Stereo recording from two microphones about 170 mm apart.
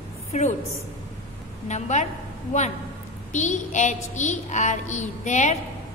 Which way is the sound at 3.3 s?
45° left (ahead or behind).